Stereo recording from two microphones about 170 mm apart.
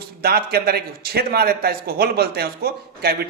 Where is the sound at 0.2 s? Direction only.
65° right (ahead or behind).